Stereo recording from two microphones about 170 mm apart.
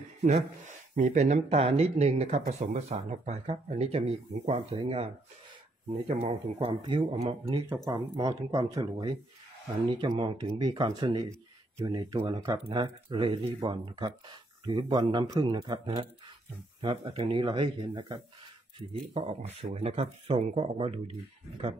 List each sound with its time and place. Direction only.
0.7 s speech: 45° right (ahead or behind)
7.7 s speech: 20° right (ahead or behind)
19.1 s speech: 40° right (ahead or behind)